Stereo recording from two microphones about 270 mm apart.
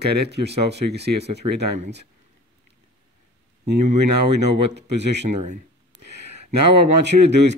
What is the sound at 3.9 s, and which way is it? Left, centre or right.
Speech, right.